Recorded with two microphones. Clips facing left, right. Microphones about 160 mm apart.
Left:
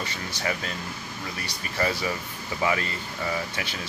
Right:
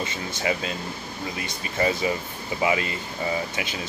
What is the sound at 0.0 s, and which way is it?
Speech, 20° right (ahead or behind).